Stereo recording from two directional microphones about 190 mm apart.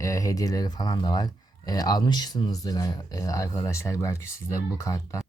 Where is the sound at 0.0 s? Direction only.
15° left (ahead or behind).